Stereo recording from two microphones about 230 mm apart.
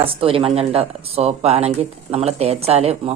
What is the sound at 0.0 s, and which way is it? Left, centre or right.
Speech, right.